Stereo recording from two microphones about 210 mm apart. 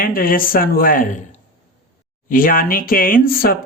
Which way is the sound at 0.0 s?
45° left (ahead or behind).